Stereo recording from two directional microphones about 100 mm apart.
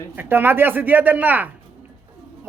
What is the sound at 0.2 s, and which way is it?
Speech, 20° right (ahead or behind).